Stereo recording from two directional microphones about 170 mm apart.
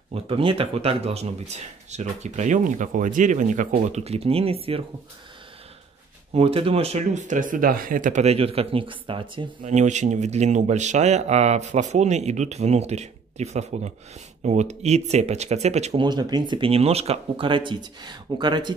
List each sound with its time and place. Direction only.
0.1 s speech: 30° right (ahead or behind)
6.3 s speech: 35° right (ahead or behind)
9.7 s speech: 45° right (ahead or behind)
16.1 s speech: 25° right (ahead or behind)